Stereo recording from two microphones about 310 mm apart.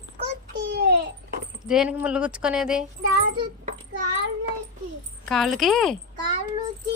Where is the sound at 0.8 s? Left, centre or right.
Right.